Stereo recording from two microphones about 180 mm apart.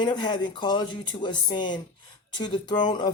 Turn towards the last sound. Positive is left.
turn(degrees=25)  # may be behind; listen again after turning